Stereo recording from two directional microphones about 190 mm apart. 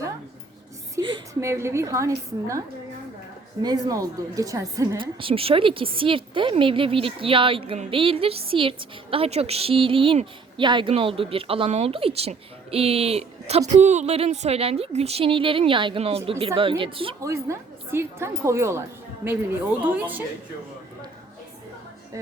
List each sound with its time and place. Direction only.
1.0 s a sound: 25° right (ahead or behind)
1.4 s a woman's voice: 15° right (ahead or behind)
3.6 s a woman's voice: 20° right (ahead or behind)
17.2 s a woman's voice: 15° right (ahead or behind)